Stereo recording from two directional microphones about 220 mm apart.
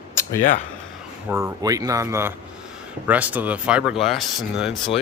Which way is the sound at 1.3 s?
15° right (ahead or behind).